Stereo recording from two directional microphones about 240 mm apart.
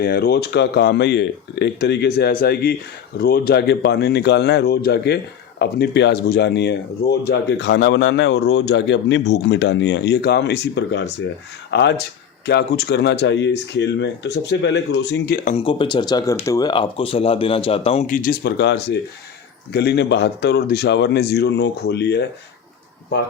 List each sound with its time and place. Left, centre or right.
0.0 s speech: left
15.4 s speech: left